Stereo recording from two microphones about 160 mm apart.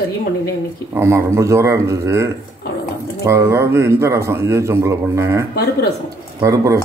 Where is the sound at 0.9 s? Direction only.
15° right (ahead or behind).